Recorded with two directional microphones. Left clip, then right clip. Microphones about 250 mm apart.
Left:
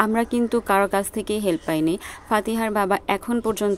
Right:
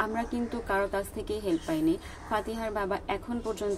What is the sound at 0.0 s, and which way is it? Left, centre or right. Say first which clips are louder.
A woman's voice: left 10 dB; left.